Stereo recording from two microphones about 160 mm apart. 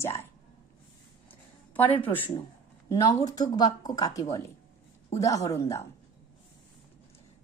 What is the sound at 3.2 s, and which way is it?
A woman's voice, 25° left (ahead or behind).